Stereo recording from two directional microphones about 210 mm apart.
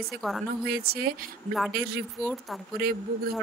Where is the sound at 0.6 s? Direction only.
45° right (ahead or behind).